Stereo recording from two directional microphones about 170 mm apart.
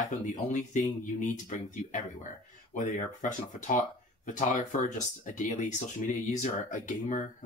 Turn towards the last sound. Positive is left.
turn(degrees=45)  # may be behind; listen again after turning